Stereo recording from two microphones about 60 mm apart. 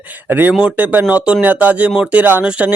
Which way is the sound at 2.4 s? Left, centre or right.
Centre.